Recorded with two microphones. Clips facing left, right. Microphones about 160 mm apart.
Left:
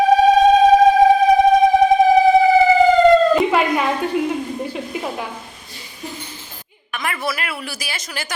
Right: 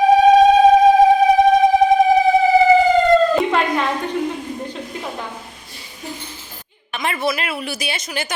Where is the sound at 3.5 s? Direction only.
10° left (ahead or behind).